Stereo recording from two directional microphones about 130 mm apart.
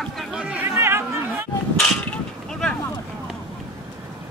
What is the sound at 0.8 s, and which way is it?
Speech, 20° right (ahead or behind).